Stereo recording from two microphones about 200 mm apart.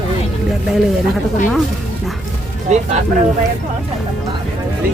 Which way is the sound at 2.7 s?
35° right (ahead or behind).